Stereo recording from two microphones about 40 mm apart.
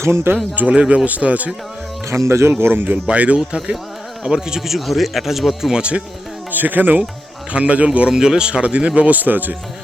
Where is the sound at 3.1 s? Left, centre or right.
Right; by 5.7 s centre.